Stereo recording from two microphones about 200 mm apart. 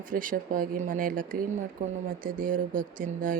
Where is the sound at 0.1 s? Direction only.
45° right (ahead or behind).